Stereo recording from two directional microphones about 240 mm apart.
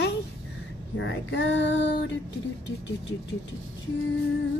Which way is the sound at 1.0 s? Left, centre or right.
Left.